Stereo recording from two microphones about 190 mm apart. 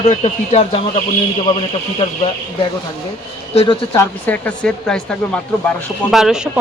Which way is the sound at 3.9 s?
10° left (ahead or behind).